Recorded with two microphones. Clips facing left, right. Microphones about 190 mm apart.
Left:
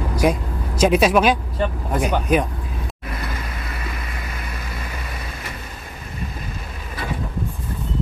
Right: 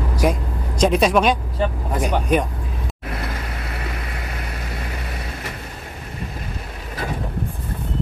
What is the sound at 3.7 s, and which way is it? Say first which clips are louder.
Vehicle: right 2 dB; 65° right (ahead or behind).